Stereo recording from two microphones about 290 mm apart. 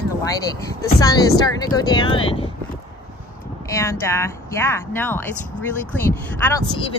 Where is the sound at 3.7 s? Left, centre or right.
Centre.